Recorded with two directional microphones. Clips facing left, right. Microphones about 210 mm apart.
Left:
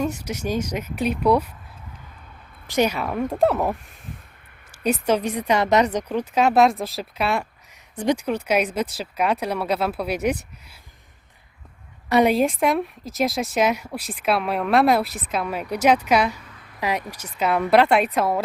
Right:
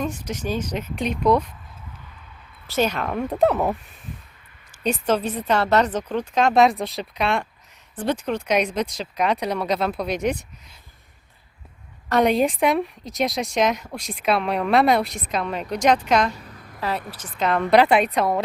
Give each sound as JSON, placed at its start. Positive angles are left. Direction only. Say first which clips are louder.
{"t": 0.0, "sound": "speech", "louder": "left 2 dB", "side_deg": 10}
{"t": 2.6, "sound": "a woman's voice", "louder": "left 1 dB", "side_deg": 15}
{"t": 4.8, "sound": "speech", "louder": "left 1 dB", "side_deg": 10}
{"t": 12.0, "sound": "a woman's voice", "louder": "left 1 dB", "side_deg": 5}
{"t": 16.4, "sound": "a sound", "louder": "right 4 dB", "side_deg": -40}
{"t": 16.8, "sound": "speech", "louder": "left 2 dB", "side_deg": 15}